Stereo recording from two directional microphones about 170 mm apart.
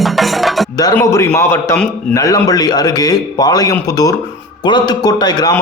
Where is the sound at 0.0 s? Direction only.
Centre (ahead or behind).